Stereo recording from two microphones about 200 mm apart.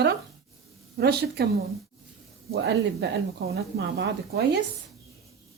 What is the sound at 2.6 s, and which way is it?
A woman's voice, 55° right (ahead or behind).